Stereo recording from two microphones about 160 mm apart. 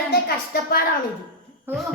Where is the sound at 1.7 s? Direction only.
15° right (ahead or behind).